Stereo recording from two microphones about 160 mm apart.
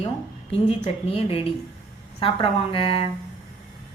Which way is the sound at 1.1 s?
35° left (ahead or behind).